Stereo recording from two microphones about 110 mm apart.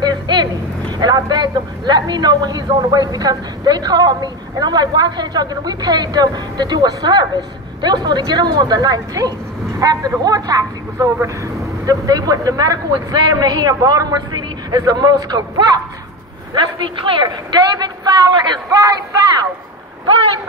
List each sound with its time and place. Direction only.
0.0 s a man's voice: 40° right (ahead or behind)
17.8 s speech: 40° right (ahead or behind)